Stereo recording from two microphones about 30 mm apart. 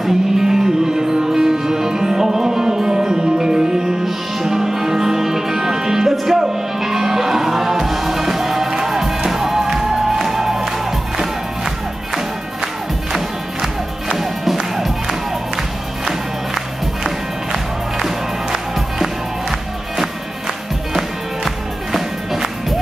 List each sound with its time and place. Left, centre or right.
0.0 s music: centre
13.1 s music: centre
14.1 s music: centre
17.0 s music: centre
21.9 s music: centre